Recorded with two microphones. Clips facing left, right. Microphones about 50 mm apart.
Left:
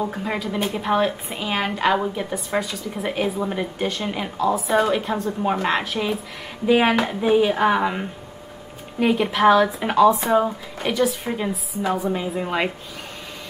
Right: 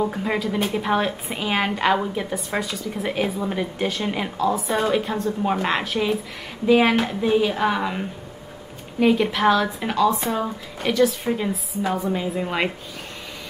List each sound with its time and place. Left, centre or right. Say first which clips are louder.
0.0 s a woman's voice: right 2 dB; centre
6.7 s speech: even; centre
9.0 s speech: left 1 dB; centre
9.8 s speech: left 4 dB; left
10.8 s a woman's voice: right 2 dB; centre